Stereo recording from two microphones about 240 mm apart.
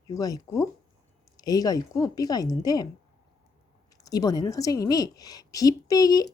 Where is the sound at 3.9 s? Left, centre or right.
Centre.